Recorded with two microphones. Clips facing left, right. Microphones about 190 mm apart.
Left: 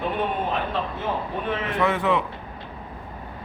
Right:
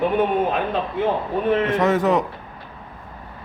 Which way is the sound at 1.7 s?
40° right (ahead or behind).